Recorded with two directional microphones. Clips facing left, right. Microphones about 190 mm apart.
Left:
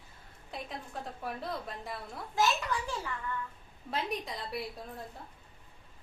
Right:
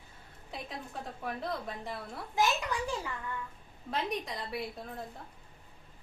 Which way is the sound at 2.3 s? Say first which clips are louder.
Even; 15° right (ahead or behind).